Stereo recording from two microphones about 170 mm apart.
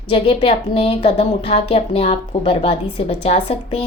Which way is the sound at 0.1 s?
35° left (ahead or behind).